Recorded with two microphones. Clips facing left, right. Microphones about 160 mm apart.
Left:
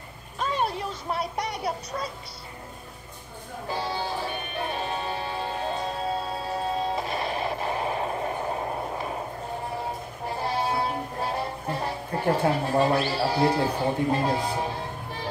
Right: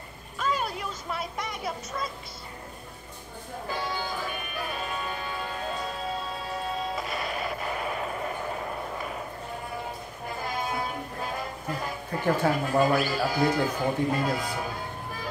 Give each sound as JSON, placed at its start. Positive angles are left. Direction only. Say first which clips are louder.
{"t": 0.4, "sound": "a child's voice", "louder": "left 2 dB", "side_deg": 30}
{"t": 3.7, "sound": "music", "louder": "left 3 dB", "side_deg": 30}
{"t": 10.2, "sound": "music", "louder": "left 5 dB", "side_deg": 30}